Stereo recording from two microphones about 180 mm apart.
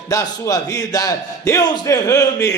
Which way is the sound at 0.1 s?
20° left (ahead or behind).